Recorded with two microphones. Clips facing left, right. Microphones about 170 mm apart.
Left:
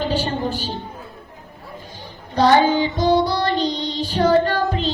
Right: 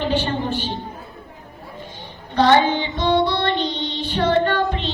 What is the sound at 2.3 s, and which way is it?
Music, 35° left (ahead or behind).